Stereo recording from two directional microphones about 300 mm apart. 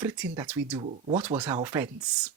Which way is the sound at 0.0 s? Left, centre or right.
Centre.